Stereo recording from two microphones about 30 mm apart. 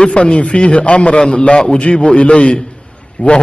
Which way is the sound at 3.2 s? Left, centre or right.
Left.